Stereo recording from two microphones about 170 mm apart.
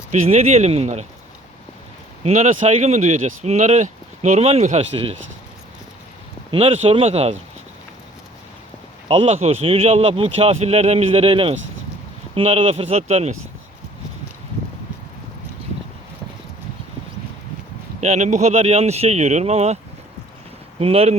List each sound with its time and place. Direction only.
0.1 s speech: 40° right (ahead or behind)
2.2 s speech: 45° right (ahead or behind)
6.5 s speech: 35° right (ahead or behind)
9.0 s speech: 35° right (ahead or behind)
18.0 s speech: 45° right (ahead or behind)